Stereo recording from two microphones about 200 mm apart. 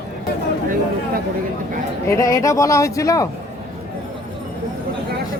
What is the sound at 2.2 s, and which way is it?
Speech, 15° left (ahead or behind).